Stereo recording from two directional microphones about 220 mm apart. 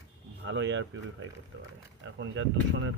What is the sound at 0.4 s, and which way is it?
Speech, 55° right (ahead or behind).